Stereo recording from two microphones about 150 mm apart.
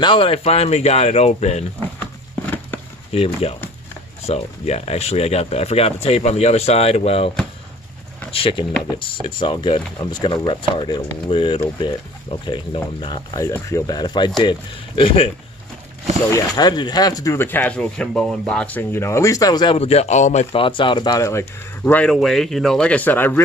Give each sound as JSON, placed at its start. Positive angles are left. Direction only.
{"t": 0.0, "sound": "speech", "side_deg": 35}
{"t": 2.0, "sound": "a sound", "side_deg": 15}
{"t": 3.1, "sound": "speech", "side_deg": 40}
{"t": 16.3, "sound": "speech", "side_deg": 25}
{"t": 19.8, "sound": "speech", "side_deg": 45}
{"t": 20.5, "sound": "speech", "side_deg": 35}
{"t": 22.1, "sound": "speech", "side_deg": 0}